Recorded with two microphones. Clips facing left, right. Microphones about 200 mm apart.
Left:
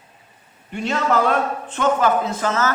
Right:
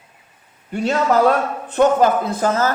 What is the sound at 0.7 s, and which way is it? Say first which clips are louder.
Speech: right 3 dB; 40° right (ahead or behind).